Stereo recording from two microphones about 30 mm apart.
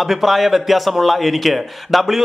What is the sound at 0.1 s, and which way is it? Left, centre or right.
A man's voice, centre.